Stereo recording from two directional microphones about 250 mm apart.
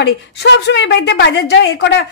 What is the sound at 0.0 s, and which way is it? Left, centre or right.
A woman's voice, left.